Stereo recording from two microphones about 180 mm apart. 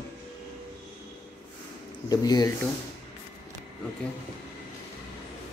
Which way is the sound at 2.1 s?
20° left (ahead or behind).